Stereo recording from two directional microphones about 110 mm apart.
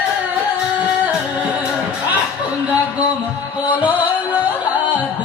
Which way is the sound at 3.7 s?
15° right (ahead or behind).